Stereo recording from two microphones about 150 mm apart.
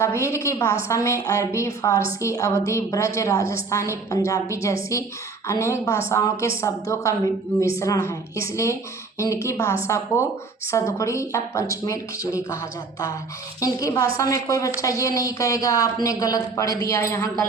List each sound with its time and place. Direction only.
0.0 s a woman's voice: 20° left (ahead or behind)
13.6 s a woman's voice: 25° left (ahead or behind)